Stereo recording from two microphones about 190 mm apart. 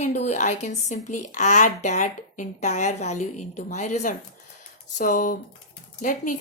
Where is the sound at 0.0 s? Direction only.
35° left (ahead or behind).